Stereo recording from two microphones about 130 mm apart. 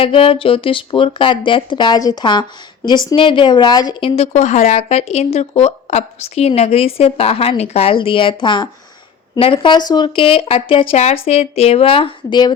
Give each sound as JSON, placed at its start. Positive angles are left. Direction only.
{"t": 0.0, "sound": "speech", "side_deg": 45}
{"t": 4.1, "sound": "speech", "side_deg": 55}